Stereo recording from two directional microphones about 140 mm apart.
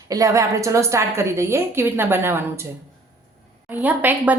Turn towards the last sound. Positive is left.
turn(degrees=-10)  # may be behind; listen again after turning